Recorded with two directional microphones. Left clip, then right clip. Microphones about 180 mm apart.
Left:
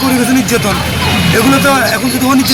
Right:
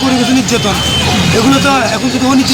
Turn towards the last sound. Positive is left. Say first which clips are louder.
# left 1 dB
turn(degrees=15)  # may be behind; listen again after turning